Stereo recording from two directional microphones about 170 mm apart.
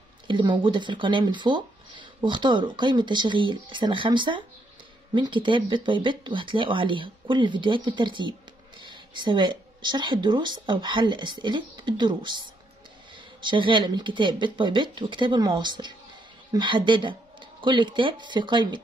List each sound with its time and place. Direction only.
0.3 s speech: 30° right (ahead or behind)